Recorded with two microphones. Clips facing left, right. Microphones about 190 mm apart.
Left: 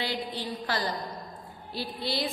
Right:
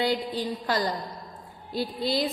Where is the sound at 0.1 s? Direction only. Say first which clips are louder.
Right 5 dB; 45° right (ahead or behind).